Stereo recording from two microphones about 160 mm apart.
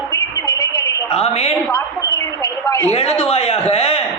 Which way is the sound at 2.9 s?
40° left (ahead or behind).